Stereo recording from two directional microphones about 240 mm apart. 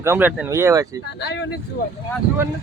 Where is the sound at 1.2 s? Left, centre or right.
Left.